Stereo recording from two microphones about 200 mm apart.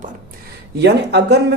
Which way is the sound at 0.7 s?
55° right (ahead or behind).